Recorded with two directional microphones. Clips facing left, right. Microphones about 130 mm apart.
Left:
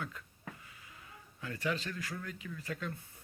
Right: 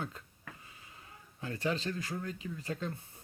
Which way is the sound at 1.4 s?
30° right (ahead or behind).